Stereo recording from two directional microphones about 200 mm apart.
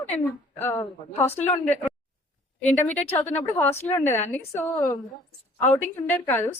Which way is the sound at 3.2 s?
10° left (ahead or behind).